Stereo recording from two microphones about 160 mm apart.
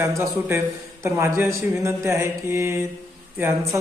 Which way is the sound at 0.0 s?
15° right (ahead or behind).